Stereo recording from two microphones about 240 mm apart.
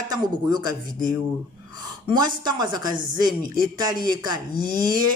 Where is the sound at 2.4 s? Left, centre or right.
Centre.